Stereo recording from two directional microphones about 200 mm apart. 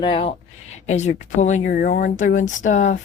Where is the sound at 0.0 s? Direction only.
25° left (ahead or behind); by 2.1 s 55° left (ahead or behind).